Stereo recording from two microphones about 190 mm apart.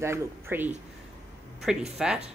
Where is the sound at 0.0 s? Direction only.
15° right (ahead or behind).